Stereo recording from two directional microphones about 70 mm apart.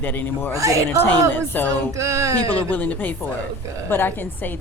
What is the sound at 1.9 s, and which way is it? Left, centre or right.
Speech, right.